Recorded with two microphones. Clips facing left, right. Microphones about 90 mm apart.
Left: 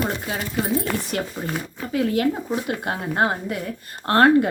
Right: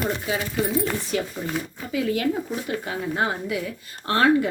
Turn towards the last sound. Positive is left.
turn(degrees=55)  # may be behind; listen again after turning